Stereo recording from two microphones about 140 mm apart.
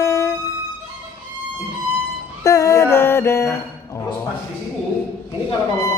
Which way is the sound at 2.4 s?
20° left (ahead or behind).